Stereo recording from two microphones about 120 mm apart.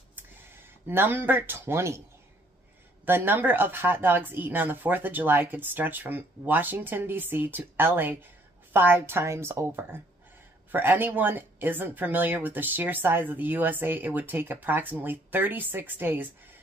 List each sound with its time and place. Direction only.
0.8 s speech: 20° right (ahead or behind)
3.1 s a woman's voice: 15° right (ahead or behind)